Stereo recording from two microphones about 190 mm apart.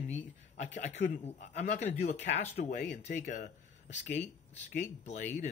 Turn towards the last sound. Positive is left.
turn(degrees=35)  # may be behind; listen again after turning